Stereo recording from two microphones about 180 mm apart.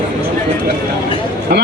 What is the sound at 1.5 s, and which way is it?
Speech, 60° right (ahead or behind).